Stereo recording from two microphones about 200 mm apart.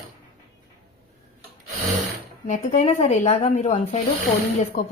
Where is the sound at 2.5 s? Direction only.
35° left (ahead or behind).